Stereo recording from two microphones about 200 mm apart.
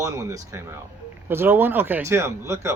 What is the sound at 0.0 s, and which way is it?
Speech, 15° right (ahead or behind).